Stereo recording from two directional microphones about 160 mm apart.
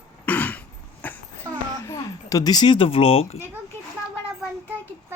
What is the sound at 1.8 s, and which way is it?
Speech, 20° left (ahead or behind).